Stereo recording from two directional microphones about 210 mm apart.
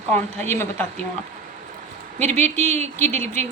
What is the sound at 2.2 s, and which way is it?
Speech, 10° left (ahead or behind).